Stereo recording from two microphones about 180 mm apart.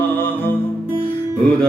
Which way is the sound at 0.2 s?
10° left (ahead or behind).